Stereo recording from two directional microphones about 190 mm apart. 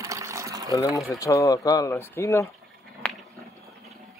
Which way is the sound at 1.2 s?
15° left (ahead or behind).